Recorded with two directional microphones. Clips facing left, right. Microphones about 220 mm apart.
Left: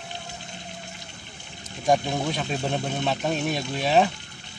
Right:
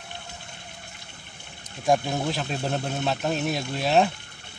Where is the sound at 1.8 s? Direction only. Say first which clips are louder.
Even; centre (ahead or behind).